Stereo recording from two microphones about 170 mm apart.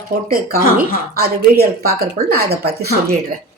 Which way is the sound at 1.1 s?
65° right (ahead or behind).